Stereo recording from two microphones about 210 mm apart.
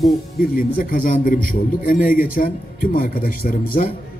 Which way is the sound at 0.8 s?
45° left (ahead or behind).